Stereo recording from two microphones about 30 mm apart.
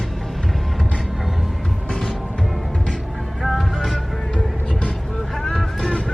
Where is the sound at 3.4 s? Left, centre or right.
Centre.